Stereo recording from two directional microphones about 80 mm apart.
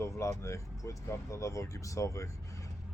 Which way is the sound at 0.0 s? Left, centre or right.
Left.